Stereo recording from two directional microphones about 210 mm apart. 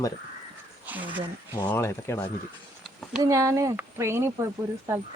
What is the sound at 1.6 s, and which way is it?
Speech, 10° left (ahead or behind).